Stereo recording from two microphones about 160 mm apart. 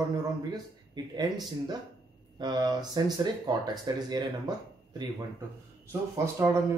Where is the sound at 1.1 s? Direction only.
25° right (ahead or behind).